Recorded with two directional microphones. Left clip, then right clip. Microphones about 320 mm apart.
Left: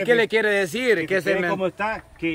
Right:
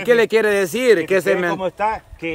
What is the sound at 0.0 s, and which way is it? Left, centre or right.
Speech, centre.